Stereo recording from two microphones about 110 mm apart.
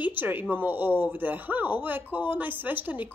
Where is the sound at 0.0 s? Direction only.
15° right (ahead or behind).